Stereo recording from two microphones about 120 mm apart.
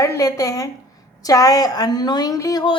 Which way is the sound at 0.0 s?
30° left (ahead or behind).